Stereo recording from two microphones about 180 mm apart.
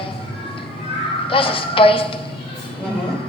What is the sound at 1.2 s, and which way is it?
Speech, 30° left (ahead or behind).